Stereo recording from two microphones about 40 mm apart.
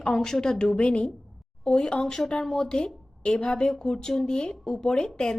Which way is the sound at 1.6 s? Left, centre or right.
Centre.